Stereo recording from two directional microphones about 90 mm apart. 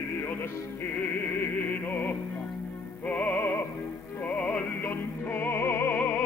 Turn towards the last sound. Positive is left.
turn(degrees=20)  # may be behind; listen again after turning